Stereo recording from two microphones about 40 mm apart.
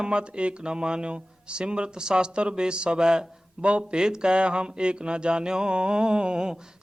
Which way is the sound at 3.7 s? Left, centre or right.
Right.